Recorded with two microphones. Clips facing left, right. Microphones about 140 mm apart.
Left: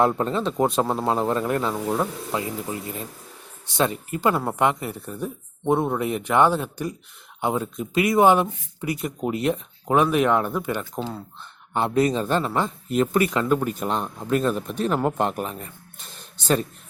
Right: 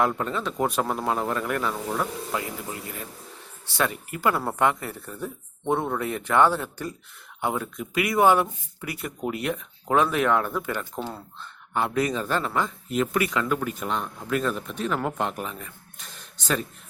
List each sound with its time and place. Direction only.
0.0 s speech: 30° left (ahead or behind)
12.9 s speech: 35° left (ahead or behind)